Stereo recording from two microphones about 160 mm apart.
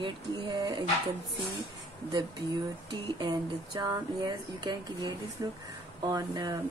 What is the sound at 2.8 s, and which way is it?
Speech, 30° right (ahead or behind).